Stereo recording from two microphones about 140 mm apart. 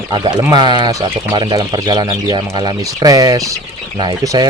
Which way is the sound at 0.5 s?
30° right (ahead or behind).